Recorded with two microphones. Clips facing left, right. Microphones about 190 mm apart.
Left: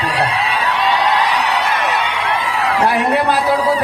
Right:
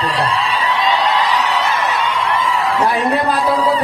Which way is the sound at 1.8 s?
70° left (ahead or behind).